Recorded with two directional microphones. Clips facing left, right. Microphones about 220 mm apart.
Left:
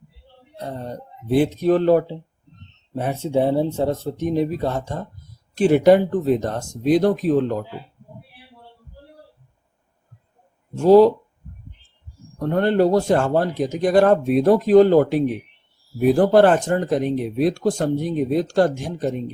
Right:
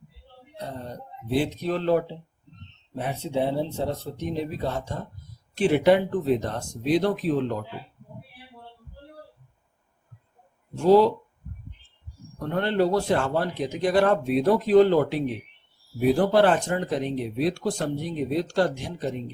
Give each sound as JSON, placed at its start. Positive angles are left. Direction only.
{"t": 1.3, "sound": "speech", "side_deg": 50}
{"t": 10.8, "sound": "speech", "side_deg": 45}
{"t": 12.5, "sound": "speech", "side_deg": 45}